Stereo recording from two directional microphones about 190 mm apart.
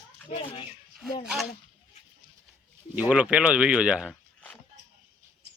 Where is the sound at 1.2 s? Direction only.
5° right (ahead or behind).